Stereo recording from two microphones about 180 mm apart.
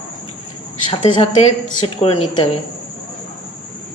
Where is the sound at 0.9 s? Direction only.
30° left (ahead or behind).